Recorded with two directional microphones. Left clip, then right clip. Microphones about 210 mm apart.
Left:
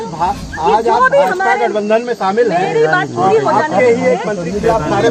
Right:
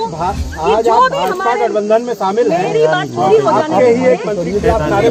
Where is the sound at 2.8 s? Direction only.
35° right (ahead or behind).